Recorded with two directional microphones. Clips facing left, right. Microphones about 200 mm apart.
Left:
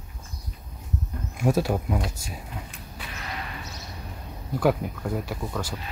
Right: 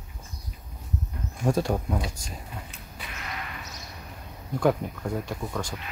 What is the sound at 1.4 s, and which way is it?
Speech, 5° left (ahead or behind).